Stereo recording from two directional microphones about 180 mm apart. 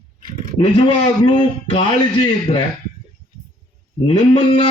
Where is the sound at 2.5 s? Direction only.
35° left (ahead or behind).